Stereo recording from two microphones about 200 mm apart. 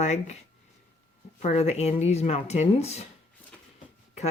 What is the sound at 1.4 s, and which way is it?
Speech, 35° left (ahead or behind).